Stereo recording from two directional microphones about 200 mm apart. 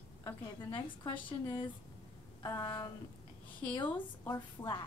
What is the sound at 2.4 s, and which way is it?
A woman's voice, 15° left (ahead or behind).